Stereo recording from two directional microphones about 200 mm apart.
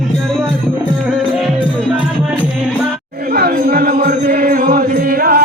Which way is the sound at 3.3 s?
45° right (ahead or behind).